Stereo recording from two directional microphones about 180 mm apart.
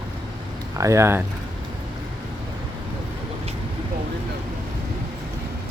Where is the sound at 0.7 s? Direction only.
15° right (ahead or behind).